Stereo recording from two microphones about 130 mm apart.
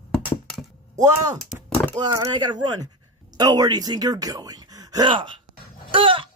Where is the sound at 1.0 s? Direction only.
25° right (ahead or behind).